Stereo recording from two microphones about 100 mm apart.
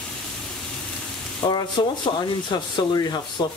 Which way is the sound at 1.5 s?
50° left (ahead or behind).